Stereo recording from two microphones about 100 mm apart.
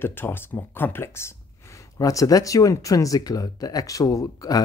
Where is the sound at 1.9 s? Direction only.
35° left (ahead or behind).